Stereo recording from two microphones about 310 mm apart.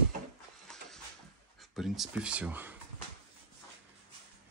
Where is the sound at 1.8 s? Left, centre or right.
Centre.